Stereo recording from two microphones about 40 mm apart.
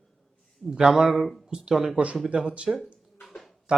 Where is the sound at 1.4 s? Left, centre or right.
Centre.